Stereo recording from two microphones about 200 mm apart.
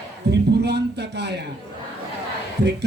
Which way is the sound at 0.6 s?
55° right (ahead or behind).